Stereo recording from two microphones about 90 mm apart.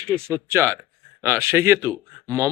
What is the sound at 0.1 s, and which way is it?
Speech, 30° right (ahead or behind).